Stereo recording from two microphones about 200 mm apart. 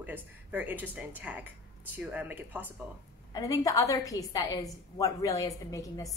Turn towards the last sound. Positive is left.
turn(degrees=15)  # may be behind; listen again after turning